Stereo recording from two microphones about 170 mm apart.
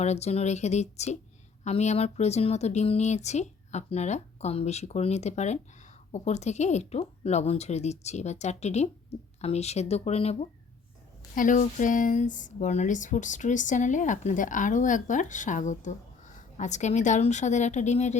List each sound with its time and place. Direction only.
0.0 s speech: 40° left (ahead or behind)
11.3 s speech: 50° left (ahead or behind)